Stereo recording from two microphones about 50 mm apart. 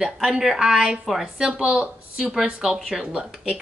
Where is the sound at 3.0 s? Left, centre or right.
Right.